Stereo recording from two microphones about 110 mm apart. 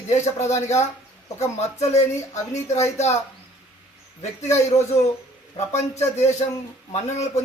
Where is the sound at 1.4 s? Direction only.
80° left.